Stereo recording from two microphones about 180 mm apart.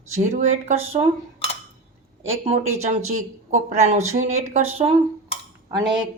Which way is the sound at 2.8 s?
40° right (ahead or behind).